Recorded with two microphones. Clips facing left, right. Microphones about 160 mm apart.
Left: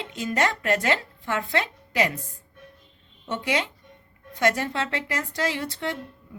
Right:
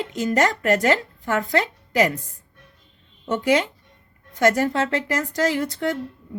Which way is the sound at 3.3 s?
45° right (ahead or behind).